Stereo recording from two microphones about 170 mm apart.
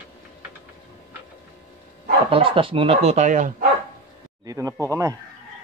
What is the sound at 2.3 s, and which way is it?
Speech, 30° right (ahead or behind).